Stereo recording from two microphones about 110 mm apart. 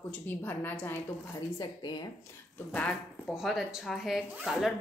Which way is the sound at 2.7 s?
10° left (ahead or behind).